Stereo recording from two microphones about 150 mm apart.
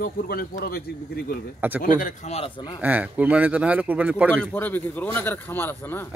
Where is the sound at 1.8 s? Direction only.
60° left (ahead or behind); by 2.8 s 30° left (ahead or behind).